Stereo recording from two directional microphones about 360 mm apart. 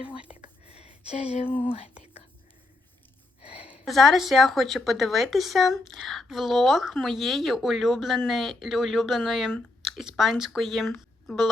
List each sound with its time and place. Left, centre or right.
0.6 s a sound: centre
1.7 s whispering: centre
3.5 s speech: centre